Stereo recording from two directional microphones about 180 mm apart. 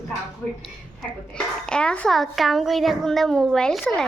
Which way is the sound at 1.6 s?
5° left (ahead or behind).